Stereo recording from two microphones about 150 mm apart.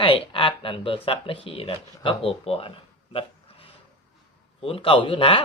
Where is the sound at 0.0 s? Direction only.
35° left (ahead or behind).